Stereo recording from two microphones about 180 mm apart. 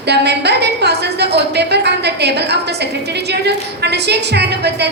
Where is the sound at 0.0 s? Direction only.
70° right (ahead or behind).